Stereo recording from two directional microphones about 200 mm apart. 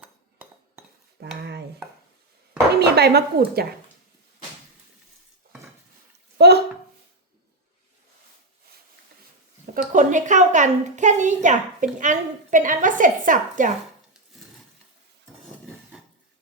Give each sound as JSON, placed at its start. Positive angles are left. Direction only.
{"t": 1.4, "sound": "dishes", "side_deg": -55}
{"t": 2.7, "sound": "speech", "side_deg": -55}
{"t": 6.3, "sound": "a sound", "side_deg": -55}
{"t": 9.9, "sound": "a child's voice", "side_deg": -40}